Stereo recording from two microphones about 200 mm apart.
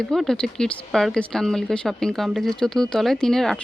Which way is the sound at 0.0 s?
Centre (ahead or behind).